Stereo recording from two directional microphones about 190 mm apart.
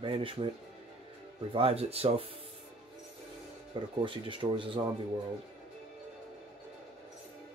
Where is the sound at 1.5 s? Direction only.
30° right (ahead or behind).